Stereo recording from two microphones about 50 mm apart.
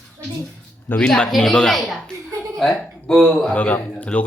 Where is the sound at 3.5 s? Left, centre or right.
Left.